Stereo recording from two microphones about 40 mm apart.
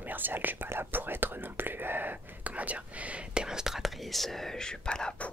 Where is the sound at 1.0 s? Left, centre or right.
Right.